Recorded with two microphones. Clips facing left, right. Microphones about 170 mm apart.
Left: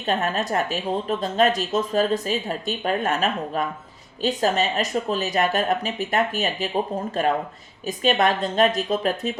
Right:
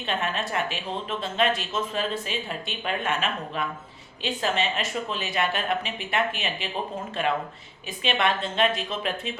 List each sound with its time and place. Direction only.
0.0 s speech: 40° left (ahead or behind)